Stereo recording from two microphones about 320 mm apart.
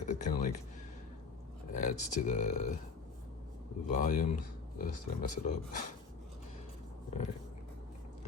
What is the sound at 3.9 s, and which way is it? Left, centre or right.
Speech, left.